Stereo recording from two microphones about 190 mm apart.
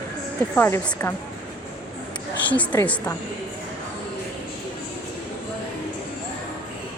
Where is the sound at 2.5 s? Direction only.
10° left (ahead or behind).